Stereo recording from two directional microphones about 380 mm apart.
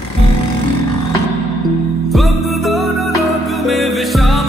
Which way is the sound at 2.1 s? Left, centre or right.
Centre.